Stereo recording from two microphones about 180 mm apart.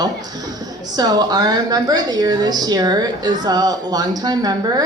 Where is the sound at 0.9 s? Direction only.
20° right (ahead or behind).